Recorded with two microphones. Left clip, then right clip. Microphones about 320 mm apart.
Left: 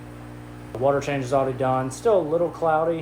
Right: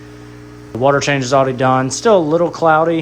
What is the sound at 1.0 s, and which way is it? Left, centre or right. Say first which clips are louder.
Speech: right 9 dB; right.